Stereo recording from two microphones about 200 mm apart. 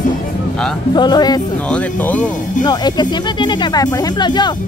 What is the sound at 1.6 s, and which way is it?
Speech, 5° left (ahead or behind).